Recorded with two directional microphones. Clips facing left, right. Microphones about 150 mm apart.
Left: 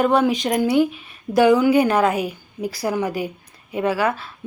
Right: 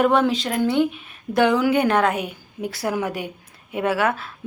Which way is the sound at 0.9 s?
Centre (ahead or behind).